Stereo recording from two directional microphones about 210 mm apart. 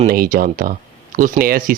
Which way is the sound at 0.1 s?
45° right (ahead or behind).